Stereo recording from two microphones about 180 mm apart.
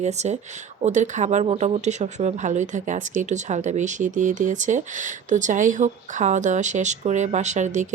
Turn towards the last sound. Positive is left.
turn(degrees=-40)  # may be behind; listen again after turning